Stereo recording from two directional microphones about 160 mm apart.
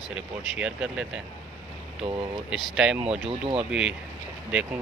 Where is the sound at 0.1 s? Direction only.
5° right (ahead or behind).